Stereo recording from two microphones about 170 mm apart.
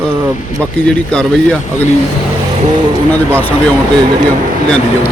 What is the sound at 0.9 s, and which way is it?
Speech, 5° left (ahead or behind).